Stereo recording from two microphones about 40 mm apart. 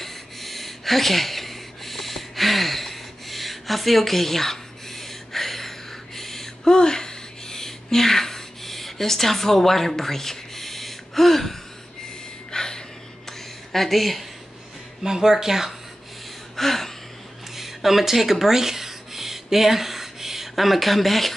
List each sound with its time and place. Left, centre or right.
0.0 s a sound: centre
12.4 s gasp: centre
13.7 s speech: centre
15.0 s speech: centre
16.5 s gasp: centre
17.6 s a sound: centre